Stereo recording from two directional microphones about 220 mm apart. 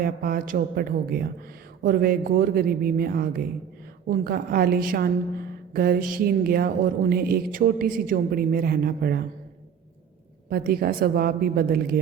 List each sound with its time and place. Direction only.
0.0 s a woman's voice: 45° right (ahead or behind)
10.5 s a woman's voice: 45° right (ahead or behind)